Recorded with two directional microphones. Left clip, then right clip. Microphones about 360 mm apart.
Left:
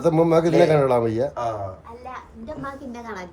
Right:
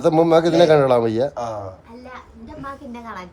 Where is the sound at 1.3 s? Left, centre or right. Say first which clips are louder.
Even; centre.